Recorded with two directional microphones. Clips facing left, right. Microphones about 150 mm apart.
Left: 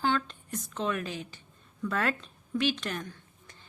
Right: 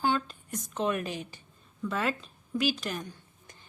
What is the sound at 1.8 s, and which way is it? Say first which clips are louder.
A woman's voice: even; centre (ahead or behind).